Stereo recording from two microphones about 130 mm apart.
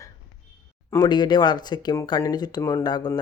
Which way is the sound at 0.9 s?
35° left (ahead or behind).